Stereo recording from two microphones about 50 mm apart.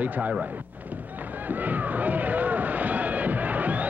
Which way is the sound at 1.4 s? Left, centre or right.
Right.